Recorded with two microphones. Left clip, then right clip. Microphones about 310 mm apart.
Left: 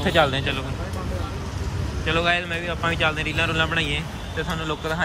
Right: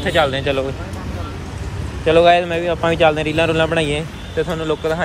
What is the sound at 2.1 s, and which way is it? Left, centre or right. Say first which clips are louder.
Speech: right 10 dB; centre.